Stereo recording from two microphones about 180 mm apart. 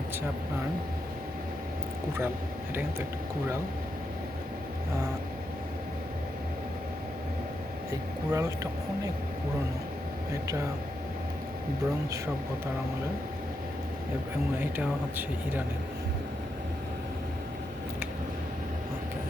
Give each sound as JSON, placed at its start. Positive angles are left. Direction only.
{"t": 8.3, "sound": "speech", "side_deg": -20}